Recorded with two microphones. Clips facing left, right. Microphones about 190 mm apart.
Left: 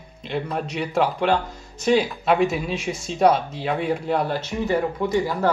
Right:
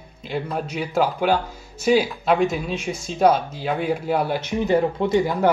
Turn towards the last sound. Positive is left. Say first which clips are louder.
# right 2 dB
turn(degrees=-20)  # may be behind; listen again after turning